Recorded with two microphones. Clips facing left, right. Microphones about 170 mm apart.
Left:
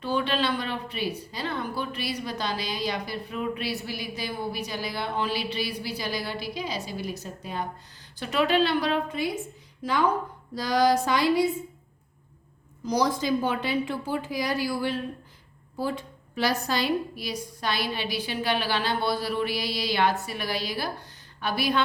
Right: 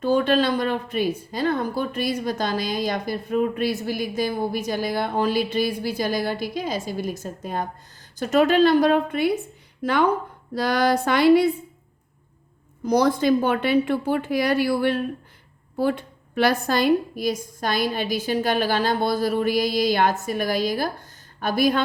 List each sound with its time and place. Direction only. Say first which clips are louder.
0.0 s speech: right 7 dB; 45° right (ahead or behind); by 11.4 s 60° right (ahead or behind)
12.8 s speech: right 6 dB; 55° right (ahead or behind)